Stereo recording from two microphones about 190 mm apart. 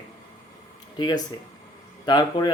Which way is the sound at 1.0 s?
20° left (ahead or behind).